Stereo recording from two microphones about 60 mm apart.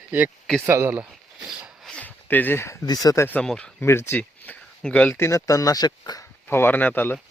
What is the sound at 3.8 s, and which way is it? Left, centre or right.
Speech, left.